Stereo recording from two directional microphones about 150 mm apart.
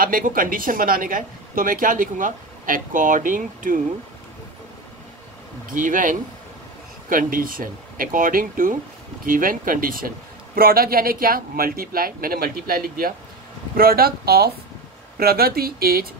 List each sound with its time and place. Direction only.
0.0 s speech: 70° right (ahead or behind)
5.7 s a man's voice: 60° right (ahead or behind); by 16.1 s 80° right